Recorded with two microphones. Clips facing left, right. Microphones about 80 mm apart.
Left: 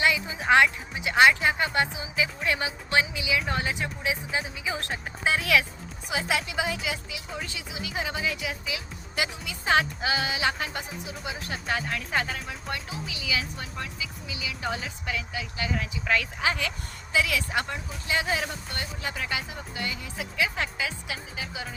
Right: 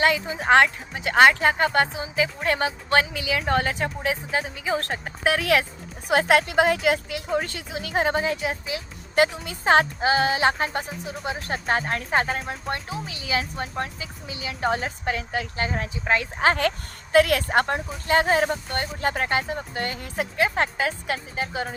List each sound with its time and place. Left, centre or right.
0.0 s a woman's voice: right
5.2 s speech: right
6.1 s a woman's voice: right
16.4 s a woman's voice: right